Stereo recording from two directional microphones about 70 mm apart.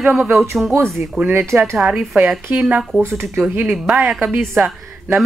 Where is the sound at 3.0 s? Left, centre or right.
Right.